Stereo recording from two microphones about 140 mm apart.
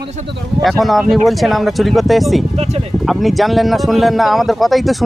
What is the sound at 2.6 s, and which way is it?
Speech, 45° right (ahead or behind).